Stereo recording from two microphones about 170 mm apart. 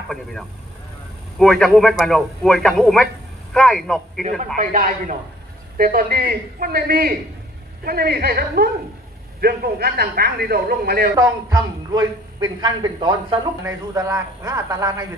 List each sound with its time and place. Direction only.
0.1 s a man's voice: centre (ahead or behind)
4.6 s a man's voice: 50° right (ahead or behind); by 11.1 s 65° right (ahead or behind)
11.1 s a man's voice: 20° right (ahead or behind)
13.6 s speech: 15° right (ahead or behind)